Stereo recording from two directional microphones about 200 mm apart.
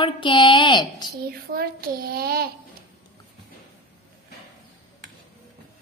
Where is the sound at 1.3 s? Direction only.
50° right (ahead or behind).